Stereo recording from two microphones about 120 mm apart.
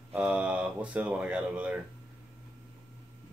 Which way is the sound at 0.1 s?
10° right (ahead or behind).